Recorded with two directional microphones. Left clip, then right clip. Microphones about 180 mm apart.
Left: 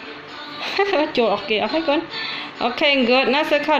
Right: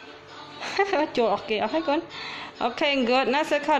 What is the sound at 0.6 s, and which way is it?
Speech, 15° right (ahead or behind).